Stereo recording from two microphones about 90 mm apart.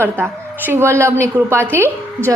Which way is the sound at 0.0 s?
25° right (ahead or behind).